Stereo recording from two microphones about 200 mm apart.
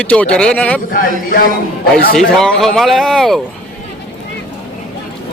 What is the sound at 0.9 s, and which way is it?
Speech, 45° left (ahead or behind).